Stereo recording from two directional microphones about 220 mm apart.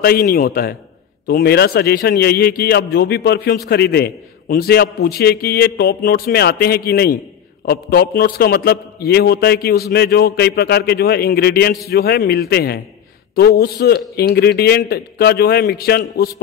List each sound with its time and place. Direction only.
0.0 s a man's voice: 45° left (ahead or behind)